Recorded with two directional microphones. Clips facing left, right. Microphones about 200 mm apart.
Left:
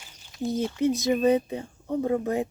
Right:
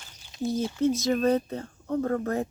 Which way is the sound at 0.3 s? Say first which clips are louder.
Even; 20° right (ahead or behind).